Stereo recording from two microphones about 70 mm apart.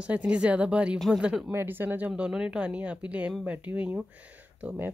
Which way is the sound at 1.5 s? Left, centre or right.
Right.